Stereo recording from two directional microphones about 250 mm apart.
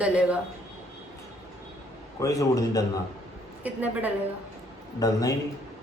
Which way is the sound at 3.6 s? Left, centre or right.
Centre.